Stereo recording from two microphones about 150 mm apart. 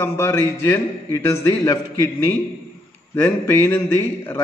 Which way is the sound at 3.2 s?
15° left (ahead or behind).